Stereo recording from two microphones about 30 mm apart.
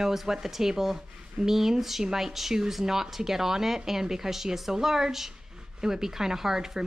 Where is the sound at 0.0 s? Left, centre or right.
Centre.